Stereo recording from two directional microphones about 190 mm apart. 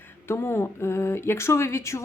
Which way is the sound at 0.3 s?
15° left (ahead or behind).